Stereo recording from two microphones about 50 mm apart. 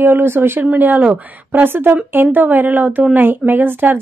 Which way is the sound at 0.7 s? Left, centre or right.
Right.